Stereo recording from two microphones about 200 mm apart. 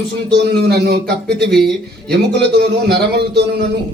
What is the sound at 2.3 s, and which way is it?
A man's voice, 55° right (ahead or behind).